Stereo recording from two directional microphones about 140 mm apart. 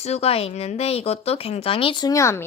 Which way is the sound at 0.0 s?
50° left (ahead or behind).